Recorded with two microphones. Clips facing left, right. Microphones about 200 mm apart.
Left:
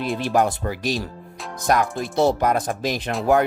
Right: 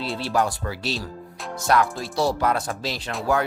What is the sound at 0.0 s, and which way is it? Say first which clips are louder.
Speech: left 3 dB; 15° left (ahead or behind).